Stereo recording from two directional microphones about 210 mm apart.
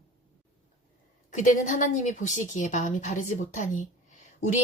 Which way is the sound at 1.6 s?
35° left (ahead or behind).